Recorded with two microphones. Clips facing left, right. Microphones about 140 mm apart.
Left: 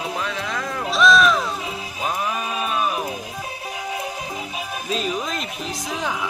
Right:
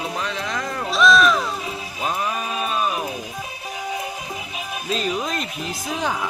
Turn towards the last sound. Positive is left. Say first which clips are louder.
# right 1 dB
turn(degrees=0)  # may be behind; listen again after turning